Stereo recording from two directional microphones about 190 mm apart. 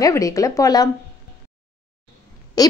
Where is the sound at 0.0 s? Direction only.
15° left (ahead or behind).